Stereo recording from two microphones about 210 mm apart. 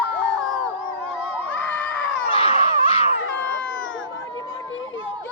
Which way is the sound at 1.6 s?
10° left (ahead or behind).